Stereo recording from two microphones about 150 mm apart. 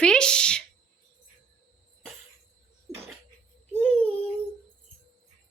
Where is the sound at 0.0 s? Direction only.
5° left (ahead or behind).